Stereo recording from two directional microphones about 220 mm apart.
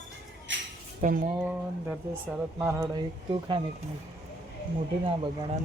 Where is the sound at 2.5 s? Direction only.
15° right (ahead or behind).